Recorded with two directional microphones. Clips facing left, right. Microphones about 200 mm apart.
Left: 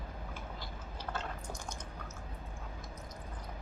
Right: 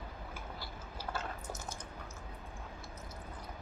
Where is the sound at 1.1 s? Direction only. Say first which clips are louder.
Even; 5° right (ahead or behind).